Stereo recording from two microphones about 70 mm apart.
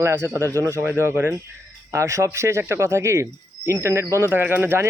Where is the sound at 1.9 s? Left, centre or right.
Right.